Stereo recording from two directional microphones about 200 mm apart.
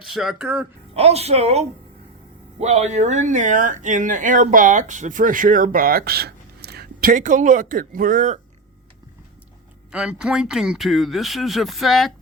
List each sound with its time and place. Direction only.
0.0 s speech: 5° right (ahead or behind)
0.9 s speech: 30° right (ahead or behind)
9.9 s speech: 5° right (ahead or behind)